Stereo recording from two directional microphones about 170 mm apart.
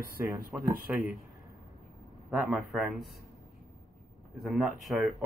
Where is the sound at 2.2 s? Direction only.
Centre (ahead or behind).